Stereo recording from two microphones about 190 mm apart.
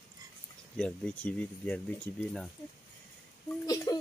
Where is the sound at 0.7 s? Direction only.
5° left (ahead or behind).